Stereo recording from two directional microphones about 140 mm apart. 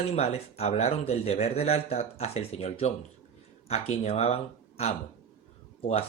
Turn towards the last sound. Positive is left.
turn(degrees=45)  # may be behind; listen again after turning